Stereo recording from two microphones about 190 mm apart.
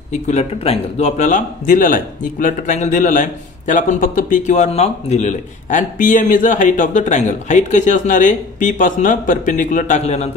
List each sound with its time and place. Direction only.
0.1 s speech: 35° left (ahead or behind)